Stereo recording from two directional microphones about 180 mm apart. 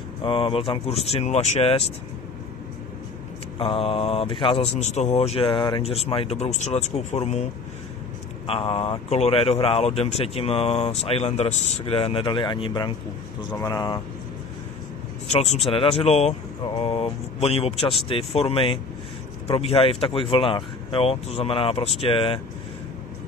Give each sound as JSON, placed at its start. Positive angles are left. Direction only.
{"t": 0.2, "sound": "speech", "side_deg": 30}
{"t": 3.5, "sound": "speech", "side_deg": 30}
{"t": 8.5, "sound": "speech", "side_deg": 30}
{"t": 15.2, "sound": "speech", "side_deg": 35}
{"t": 16.6, "sound": "speech", "side_deg": 25}